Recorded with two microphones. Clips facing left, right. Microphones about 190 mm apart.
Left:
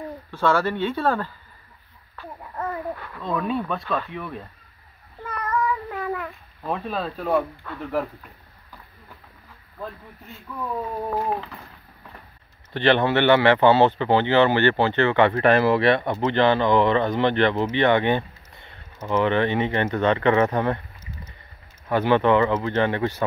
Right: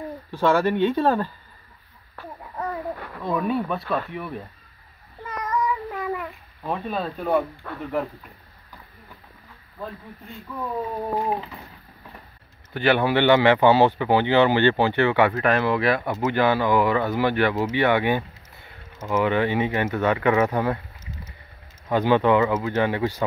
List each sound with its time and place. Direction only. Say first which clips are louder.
0.3 s speech: right 2 dB; 15° right (ahead or behind)
2.5 s a sound: even; centre (ahead or behind)
3.2 s speech: right 2 dB; 10° right (ahead or behind)
5.4 s cat: even; centre (ahead or behind)
11.1 s speech: even; 5° right (ahead or behind)
12.7 s speech: left 1 dB; 5° right (ahead or behind)
21.8 s speech: even; 15° right (ahead or behind)